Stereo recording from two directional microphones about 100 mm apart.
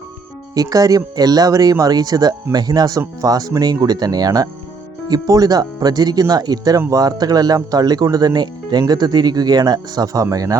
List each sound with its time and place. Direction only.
0.5 s speech: 35° right (ahead or behind)